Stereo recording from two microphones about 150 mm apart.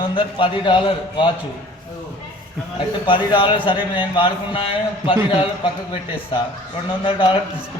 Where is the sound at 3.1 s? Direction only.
35° left (ahead or behind).